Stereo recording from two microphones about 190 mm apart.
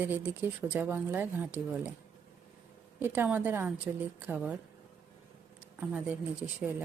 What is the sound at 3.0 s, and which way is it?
Speech, 10° right (ahead or behind).